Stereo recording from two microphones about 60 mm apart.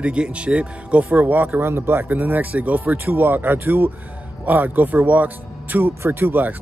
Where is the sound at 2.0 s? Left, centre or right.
Right.